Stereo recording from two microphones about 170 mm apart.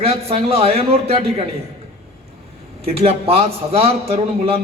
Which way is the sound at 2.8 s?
35° right (ahead or behind).